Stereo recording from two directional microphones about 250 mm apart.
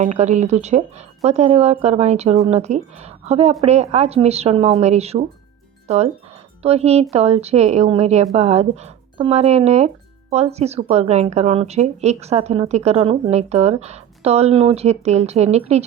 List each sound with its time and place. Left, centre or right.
0.2 s speech: right
6.6 s speech: right